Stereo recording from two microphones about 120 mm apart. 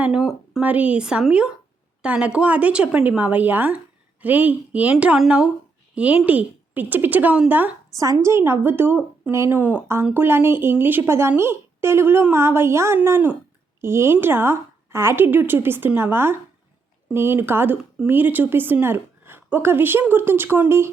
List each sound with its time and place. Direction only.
0.0 s a woman's voice: 5° right (ahead or behind)
0.6 s a woman's voice: 10° right (ahead or behind)
7.9 s a woman's voice: 25° right (ahead or behind)